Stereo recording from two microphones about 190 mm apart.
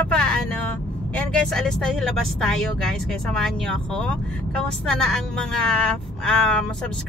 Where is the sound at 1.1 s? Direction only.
5° left (ahead or behind).